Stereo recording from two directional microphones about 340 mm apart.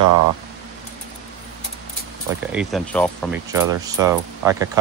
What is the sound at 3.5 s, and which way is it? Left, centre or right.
Speech, centre.